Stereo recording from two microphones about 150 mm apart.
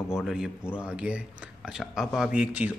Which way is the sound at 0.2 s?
Centre (ahead or behind).